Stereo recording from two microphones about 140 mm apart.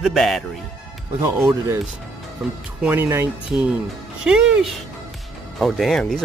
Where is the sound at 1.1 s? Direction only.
15° right (ahead or behind).